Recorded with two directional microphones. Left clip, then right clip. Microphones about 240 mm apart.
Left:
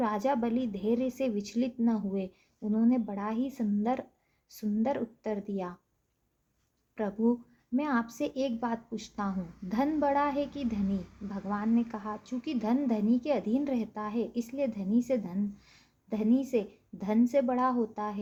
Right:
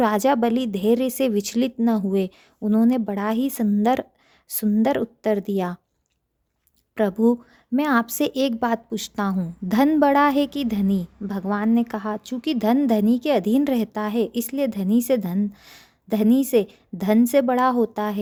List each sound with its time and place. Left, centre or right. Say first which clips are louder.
0.0 s a woman's voice: right 10 dB; right
6.9 s a woman's voice: right 10 dB; right